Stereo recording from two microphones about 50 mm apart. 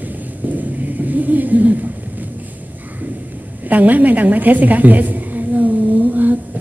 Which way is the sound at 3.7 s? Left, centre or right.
Right.